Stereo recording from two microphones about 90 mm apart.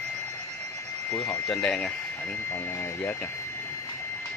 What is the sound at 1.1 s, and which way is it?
Speech, 35° left (ahead or behind).